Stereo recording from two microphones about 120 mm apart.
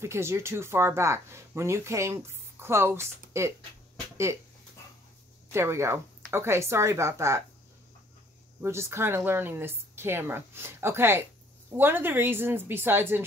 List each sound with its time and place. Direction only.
0.0 s speech: 20° right (ahead or behind)
5.5 s speech: 20° right (ahead or behind)
8.5 s a woman's voice: 20° right (ahead or behind)